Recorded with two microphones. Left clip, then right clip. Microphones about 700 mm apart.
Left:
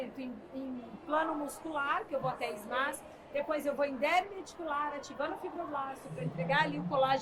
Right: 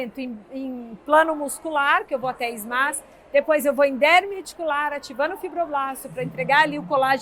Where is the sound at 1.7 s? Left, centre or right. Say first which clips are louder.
Right 13 dB; right.